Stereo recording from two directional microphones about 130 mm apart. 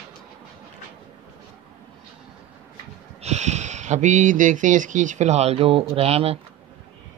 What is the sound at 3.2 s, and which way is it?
Speech, 60° right (ahead or behind).